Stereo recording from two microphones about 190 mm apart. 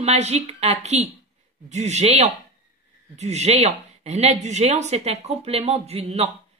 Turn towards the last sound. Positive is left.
turn(degrees=-35)  # may be behind; listen again after turning